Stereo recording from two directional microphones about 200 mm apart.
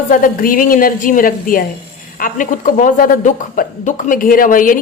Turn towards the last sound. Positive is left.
turn(degrees=45)  # may be behind; listen again after turning